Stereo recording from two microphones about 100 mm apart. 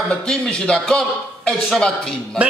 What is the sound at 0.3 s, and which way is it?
Speech, 10° left (ahead or behind).